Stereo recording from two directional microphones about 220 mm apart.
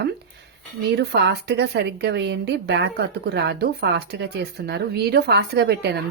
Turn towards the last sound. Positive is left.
turn(degrees=-45)  # may be behind; listen again after turning